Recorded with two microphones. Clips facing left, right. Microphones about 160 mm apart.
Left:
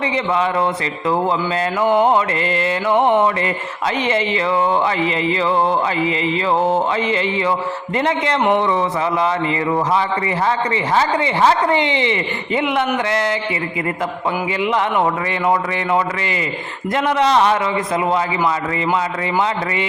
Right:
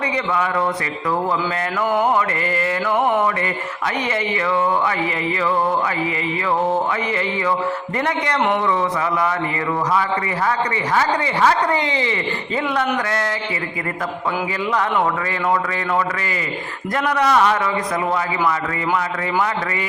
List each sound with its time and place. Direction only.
1.8 s speech: 25° left (ahead or behind)
10.9 s speech: 25° left (ahead or behind)
16.9 s speech: 25° left (ahead or behind)